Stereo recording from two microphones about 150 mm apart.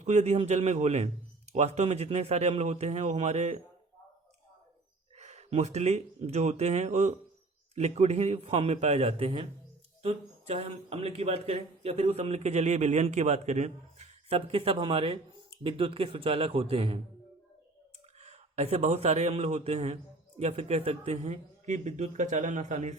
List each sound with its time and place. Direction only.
0.0 s a man's voice: 50° right (ahead or behind)
5.1 s a man's voice: 45° right (ahead or behind)
18.2 s a man's voice: 45° right (ahead or behind)